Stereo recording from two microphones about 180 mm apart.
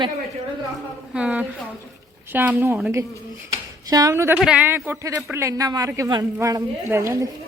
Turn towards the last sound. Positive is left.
turn(degrees=-15)  # may be behind; listen again after turning